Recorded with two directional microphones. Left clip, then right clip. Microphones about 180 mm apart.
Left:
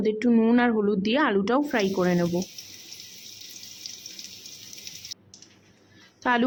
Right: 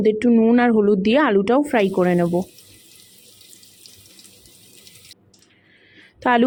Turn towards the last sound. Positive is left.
turn(degrees=-20)  # may be behind; listen again after turning